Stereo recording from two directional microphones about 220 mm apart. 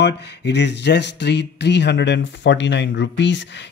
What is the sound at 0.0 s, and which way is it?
Speech, 50° left (ahead or behind).